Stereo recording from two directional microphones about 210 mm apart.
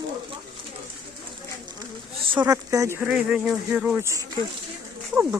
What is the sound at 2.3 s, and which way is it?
Speech, 15° right (ahead or behind).